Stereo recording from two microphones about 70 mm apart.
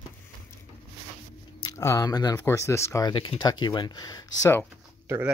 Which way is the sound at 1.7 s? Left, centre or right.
Left.